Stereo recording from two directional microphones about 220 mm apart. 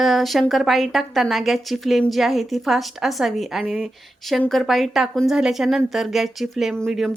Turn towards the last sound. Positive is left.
turn(degrees=0)  # may be behind; listen again after turning